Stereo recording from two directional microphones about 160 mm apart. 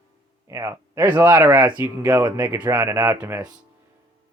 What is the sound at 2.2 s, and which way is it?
Speech, 25° right (ahead or behind).